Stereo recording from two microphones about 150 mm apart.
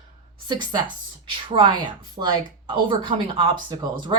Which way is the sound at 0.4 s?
30° right (ahead or behind).